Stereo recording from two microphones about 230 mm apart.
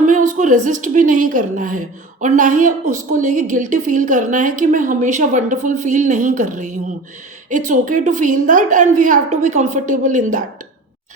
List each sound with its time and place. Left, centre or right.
0.0 s a woman's voice: right